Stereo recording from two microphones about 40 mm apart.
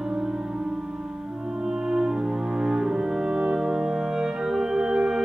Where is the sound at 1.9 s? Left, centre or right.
Centre.